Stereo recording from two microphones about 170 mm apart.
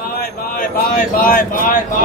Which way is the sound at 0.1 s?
55° left (ahead or behind).